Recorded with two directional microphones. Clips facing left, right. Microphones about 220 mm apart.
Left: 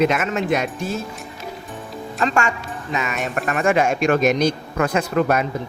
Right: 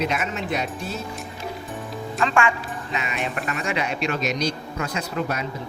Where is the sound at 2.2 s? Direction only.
40° left (ahead or behind).